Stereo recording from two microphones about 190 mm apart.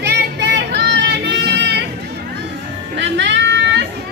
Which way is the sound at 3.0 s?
70° right (ahead or behind).